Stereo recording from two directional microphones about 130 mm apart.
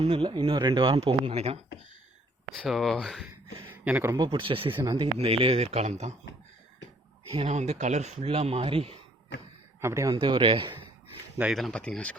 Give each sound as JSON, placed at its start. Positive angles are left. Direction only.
{"t": 0.0, "sound": "speech", "side_deg": -35}
{"t": 2.6, "sound": "speech", "side_deg": 0}
{"t": 3.7, "sound": "a sound", "side_deg": -15}
{"t": 4.1, "sound": "speech", "side_deg": -35}
{"t": 4.7, "sound": "a man's voice", "side_deg": -25}
{"t": 5.1, "sound": "speech", "side_deg": -50}
{"t": 7.3, "sound": "speech", "side_deg": -55}
{"t": 9.8, "sound": "a man's voice", "side_deg": -25}
{"t": 10.2, "sound": "speech", "side_deg": -40}
{"t": 11.5, "sound": "speech", "side_deg": 5}